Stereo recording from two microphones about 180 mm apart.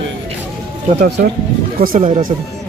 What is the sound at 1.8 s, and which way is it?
Speech, 50° right (ahead or behind).